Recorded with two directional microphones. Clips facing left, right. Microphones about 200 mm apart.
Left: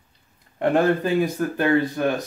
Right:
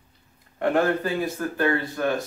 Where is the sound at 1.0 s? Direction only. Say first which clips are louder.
Left 5 dB; 15° left (ahead or behind).